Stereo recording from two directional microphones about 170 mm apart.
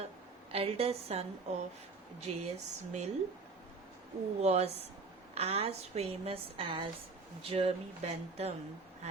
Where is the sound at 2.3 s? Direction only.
40° right (ahead or behind).